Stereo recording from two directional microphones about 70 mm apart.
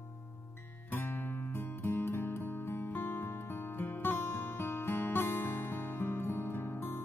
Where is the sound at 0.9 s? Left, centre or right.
Left.